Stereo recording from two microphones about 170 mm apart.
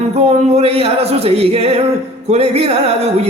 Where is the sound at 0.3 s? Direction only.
35° right (ahead or behind).